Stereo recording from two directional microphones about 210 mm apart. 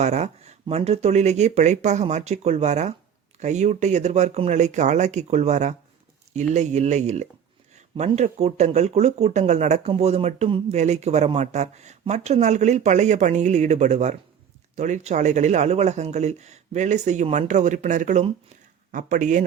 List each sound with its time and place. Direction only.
0.0 s speech: 30° right (ahead or behind)